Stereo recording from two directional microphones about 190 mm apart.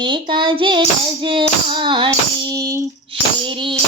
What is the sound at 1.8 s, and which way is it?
Child singing, 25° right (ahead or behind).